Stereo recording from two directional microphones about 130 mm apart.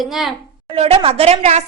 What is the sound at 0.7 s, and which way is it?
Speech, 50° right (ahead or behind).